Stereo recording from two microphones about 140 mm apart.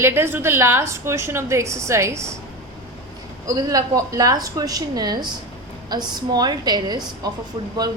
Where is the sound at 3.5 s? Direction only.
25° right (ahead or behind).